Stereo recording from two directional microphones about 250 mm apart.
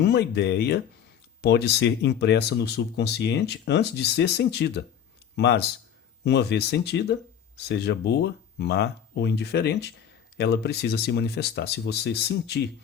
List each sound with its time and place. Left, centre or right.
0.0 s speech: left